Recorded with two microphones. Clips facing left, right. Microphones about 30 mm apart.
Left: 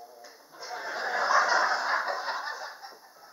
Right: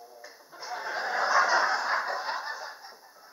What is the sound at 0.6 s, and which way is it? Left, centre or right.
Snicker, centre.